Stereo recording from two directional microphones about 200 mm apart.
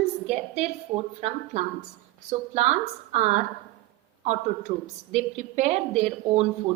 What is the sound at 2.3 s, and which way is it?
A woman's voice, 35° right (ahead or behind).